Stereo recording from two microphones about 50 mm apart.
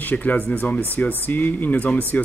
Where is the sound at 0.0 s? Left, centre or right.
Left.